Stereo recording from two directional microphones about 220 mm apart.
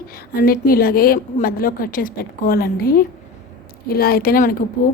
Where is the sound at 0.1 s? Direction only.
40° left (ahead or behind).